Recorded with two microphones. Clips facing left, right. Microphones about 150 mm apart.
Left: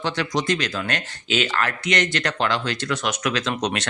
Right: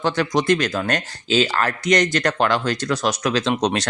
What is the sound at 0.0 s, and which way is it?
Speech, 50° right (ahead or behind).